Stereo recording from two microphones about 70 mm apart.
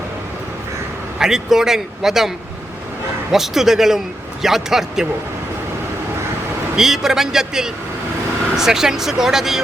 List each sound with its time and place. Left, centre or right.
1.2 s a man's voice: centre
3.3 s a man's voice: centre
6.7 s speech: centre